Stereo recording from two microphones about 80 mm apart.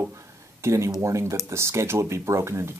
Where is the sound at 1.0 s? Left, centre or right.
Right.